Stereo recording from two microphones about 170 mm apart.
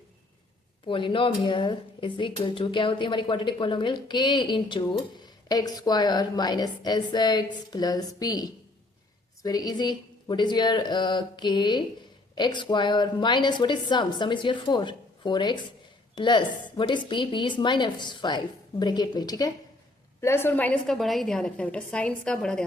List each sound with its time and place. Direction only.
0.9 s a woman's voice: 30° left (ahead or behind); by 22.6 s 5° left (ahead or behind)